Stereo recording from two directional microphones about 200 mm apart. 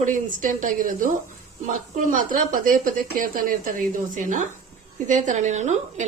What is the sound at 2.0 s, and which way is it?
A woman's voice, 40° right (ahead or behind).